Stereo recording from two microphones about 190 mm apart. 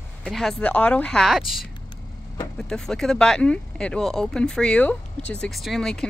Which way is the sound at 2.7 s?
5° left (ahead or behind).